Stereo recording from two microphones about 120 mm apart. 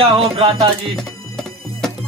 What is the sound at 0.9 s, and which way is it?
Music, 5° left (ahead or behind).